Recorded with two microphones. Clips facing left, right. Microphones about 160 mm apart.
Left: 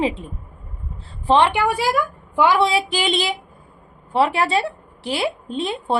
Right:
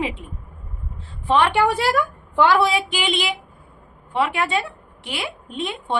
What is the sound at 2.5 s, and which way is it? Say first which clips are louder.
A woman's voice: left 1 dB; 30° left (ahead or behind).